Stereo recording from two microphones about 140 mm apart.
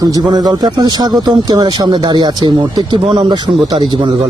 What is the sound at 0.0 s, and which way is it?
Speech, 30° right (ahead or behind).